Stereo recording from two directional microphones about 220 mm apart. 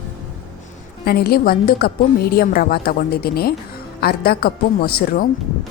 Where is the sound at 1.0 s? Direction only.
45° left (ahead or behind).